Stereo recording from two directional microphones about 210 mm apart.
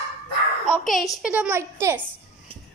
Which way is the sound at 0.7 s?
Centre (ahead or behind).